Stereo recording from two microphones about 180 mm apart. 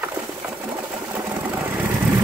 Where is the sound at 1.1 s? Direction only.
10° right (ahead or behind).